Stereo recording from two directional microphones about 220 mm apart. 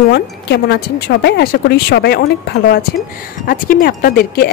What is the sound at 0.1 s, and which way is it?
A woman's voice, 50° left (ahead or behind).